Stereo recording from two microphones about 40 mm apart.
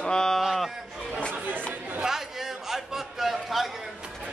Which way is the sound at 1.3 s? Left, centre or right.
Right.